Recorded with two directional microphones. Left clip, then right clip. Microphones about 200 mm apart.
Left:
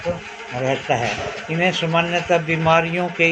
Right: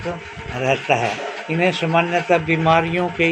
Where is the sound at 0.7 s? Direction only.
25° right (ahead or behind).